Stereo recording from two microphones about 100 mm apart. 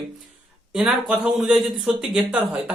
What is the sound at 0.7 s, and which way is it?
Speech, 5° right (ahead or behind).